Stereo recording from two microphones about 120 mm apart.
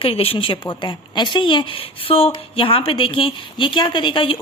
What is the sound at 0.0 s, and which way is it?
A woman's voice, 50° left (ahead or behind).